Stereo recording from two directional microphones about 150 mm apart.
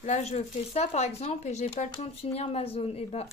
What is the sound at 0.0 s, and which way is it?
Speech, 45° left (ahead or behind).